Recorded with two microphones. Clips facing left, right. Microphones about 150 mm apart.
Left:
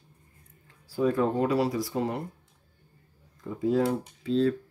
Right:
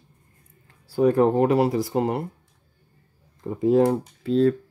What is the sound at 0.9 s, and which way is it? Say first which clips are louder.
Speech: right 7 dB; 70° right (ahead or behind).